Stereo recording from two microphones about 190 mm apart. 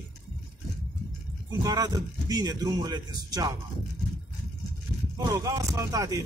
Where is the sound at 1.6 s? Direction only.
20° right (ahead or behind).